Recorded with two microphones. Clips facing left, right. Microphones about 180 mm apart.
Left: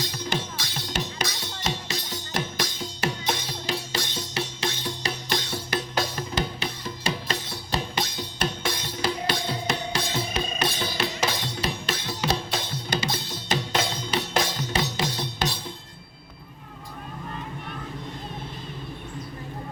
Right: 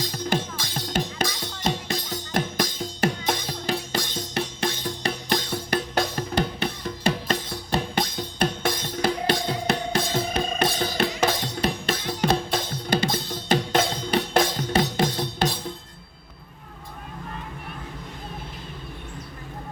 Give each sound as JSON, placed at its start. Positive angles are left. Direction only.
{"t": 0.0, "sound": "music", "side_deg": -45}